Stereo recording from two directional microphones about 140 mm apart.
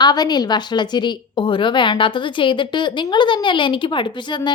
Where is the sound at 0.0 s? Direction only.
30° left (ahead or behind).